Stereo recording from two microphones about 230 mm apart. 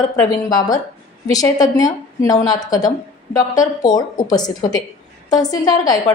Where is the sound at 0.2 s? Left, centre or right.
Centre.